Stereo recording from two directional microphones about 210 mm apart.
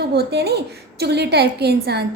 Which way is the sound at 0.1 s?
50° right (ahead or behind).